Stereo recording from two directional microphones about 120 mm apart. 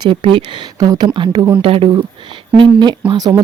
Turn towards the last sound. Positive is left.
turn(degrees=-35)  # may be behind; listen again after turning